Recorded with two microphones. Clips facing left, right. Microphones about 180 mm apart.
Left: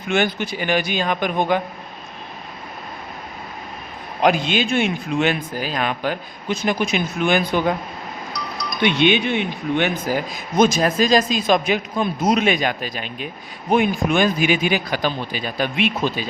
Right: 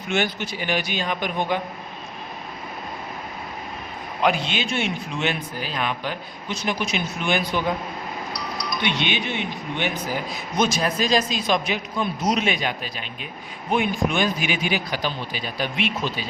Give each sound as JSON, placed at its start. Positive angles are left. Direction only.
{"t": 0.1, "sound": "a man's voice", "side_deg": 50}
{"t": 4.2, "sound": "a man's voice", "side_deg": 45}
{"t": 8.3, "sound": "music", "side_deg": 50}
{"t": 9.7, "sound": "a man's voice", "side_deg": 55}